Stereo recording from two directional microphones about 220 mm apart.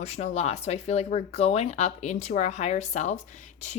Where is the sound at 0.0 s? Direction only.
30° left (ahead or behind).